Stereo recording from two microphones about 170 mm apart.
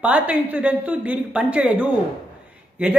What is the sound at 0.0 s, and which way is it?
A woman's voice, 10° right (ahead or behind).